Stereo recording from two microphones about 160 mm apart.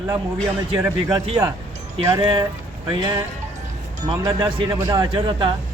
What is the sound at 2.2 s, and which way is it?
A man's voice, 30° right (ahead or behind).